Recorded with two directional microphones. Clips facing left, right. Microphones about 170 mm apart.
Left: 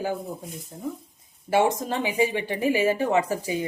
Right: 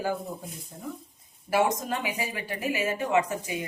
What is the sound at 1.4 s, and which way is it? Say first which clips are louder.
Speech: left 3 dB; 25° left (ahead or behind).